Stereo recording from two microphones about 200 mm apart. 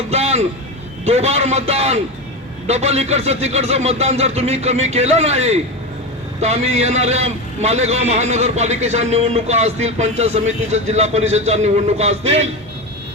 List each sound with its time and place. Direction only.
0.1 s a man's voice: 30° right (ahead or behind)